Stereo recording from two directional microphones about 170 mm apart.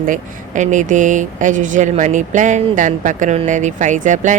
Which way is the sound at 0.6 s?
45° right (ahead or behind).